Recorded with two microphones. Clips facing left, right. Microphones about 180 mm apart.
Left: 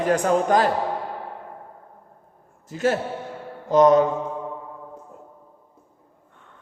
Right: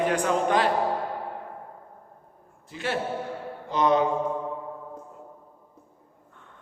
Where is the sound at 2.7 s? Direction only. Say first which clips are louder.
Left 6 dB; 45° left (ahead or behind).